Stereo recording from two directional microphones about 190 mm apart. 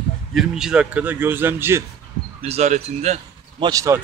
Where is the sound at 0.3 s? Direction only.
Centre (ahead or behind).